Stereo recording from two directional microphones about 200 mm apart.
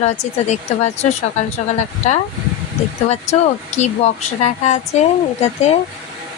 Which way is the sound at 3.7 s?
35° left (ahead or behind).